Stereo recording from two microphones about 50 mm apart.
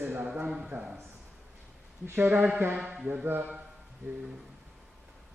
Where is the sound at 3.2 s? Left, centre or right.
Right.